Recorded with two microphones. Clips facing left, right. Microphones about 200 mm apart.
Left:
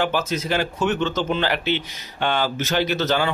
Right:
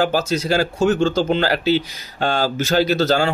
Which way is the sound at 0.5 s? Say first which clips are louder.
Right 6 dB; 35° right (ahead or behind).